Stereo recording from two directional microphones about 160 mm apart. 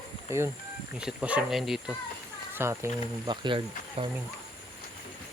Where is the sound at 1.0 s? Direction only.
5° right (ahead or behind).